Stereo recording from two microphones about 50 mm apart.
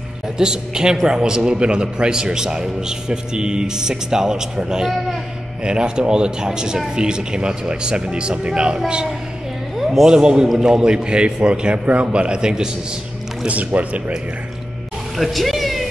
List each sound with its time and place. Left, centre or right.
0.4 s a man's voice: centre
13.5 s speech: right
15.1 s speech: centre